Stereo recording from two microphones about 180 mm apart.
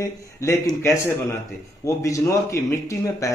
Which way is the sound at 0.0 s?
15° left (ahead or behind).